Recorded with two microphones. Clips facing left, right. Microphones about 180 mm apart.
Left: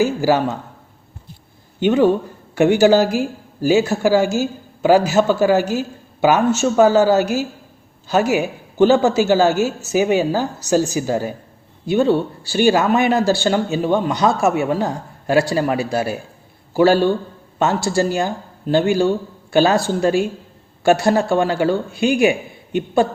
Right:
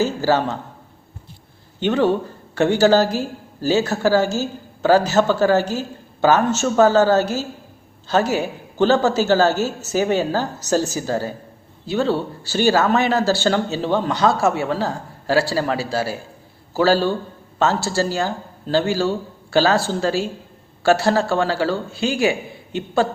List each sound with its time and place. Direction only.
0.0 s a man's voice: 10° left (ahead or behind)
1.8 s speech: 10° left (ahead or behind)